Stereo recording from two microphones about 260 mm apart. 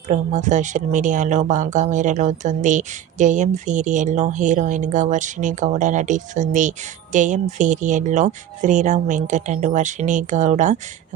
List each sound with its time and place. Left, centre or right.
0.1 s speech: right